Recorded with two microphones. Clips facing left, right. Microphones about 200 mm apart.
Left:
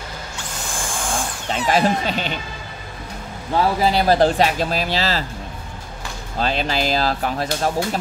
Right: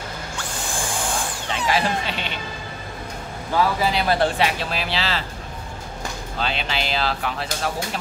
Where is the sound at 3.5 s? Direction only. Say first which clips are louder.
Left 3 dB; 35° left (ahead or behind).